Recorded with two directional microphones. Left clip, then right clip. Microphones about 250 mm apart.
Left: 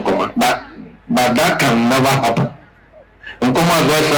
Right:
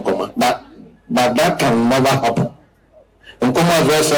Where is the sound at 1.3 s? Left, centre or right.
Centre.